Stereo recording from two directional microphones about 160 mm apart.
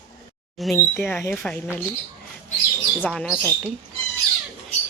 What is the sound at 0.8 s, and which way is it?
Speech, 15° left (ahead or behind).